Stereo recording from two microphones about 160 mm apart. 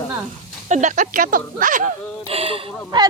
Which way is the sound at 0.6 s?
45° right (ahead or behind).